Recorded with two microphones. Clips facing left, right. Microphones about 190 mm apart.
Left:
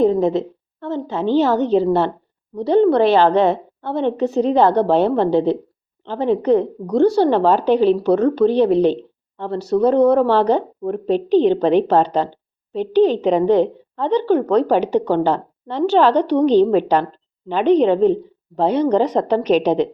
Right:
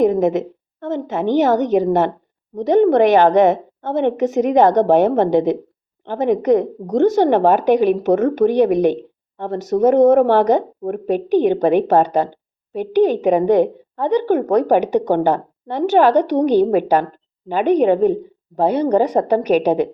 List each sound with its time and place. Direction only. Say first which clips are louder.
0.0 s a woman's voice: right 1 dB; 15° right (ahead or behind)